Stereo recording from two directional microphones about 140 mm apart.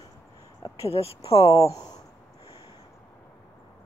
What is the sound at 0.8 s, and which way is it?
Speech, 45° left (ahead or behind).